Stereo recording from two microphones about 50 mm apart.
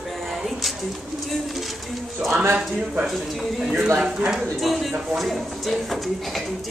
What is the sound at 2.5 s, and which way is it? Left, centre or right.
Speech, centre.